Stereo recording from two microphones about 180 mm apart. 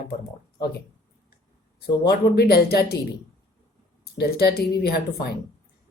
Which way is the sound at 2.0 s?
60° left (ahead or behind).